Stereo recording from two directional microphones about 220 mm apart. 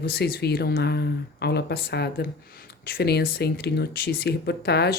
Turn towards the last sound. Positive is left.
turn(degrees=45)  # may be behind; listen again after turning